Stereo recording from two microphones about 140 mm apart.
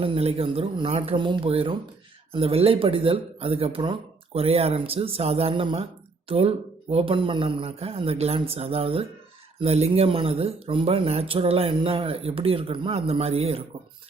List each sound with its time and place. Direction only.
0.0 s a woman's voice: 45° right (ahead or behind)